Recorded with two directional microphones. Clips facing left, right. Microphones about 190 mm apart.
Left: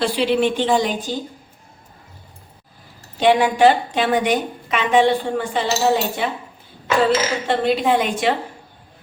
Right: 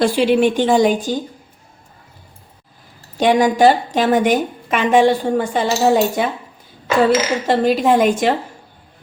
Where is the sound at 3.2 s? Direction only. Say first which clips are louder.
Right 2 dB; 45° right (ahead or behind).